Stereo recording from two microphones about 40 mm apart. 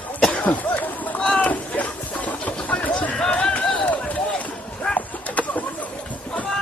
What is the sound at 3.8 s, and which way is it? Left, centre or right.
Run, left.